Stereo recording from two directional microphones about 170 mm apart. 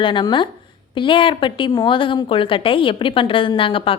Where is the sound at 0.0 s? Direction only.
30° left (ahead or behind).